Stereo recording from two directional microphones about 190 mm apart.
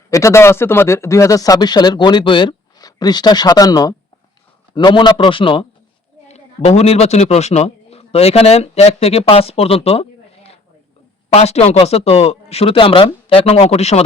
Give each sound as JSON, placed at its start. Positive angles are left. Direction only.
{"t": 0.1, "sound": "speech", "side_deg": 15}